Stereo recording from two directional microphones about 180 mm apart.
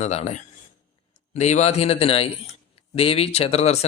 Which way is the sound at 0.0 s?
35° left (ahead or behind).